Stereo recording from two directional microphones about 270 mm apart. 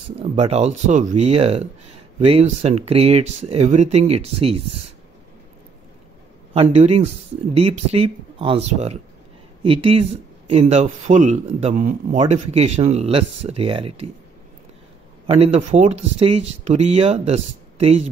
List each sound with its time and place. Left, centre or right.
0.2 s speech: right
6.5 s speech: right
15.2 s speech: right